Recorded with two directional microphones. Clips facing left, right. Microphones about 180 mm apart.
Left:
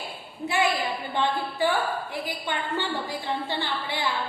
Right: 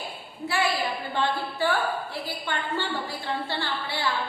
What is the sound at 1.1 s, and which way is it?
A woman's voice, 15° left (ahead or behind).